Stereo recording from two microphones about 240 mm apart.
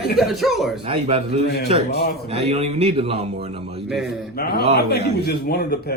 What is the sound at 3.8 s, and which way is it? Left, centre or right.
Speech, centre.